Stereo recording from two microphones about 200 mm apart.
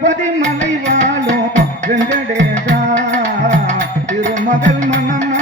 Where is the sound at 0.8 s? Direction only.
35° right (ahead or behind).